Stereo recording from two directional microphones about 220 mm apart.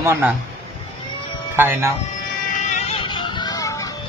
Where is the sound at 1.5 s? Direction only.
10° right (ahead or behind).